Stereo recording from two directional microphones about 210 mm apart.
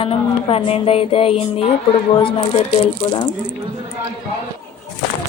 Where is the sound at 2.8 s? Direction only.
25° left (ahead or behind).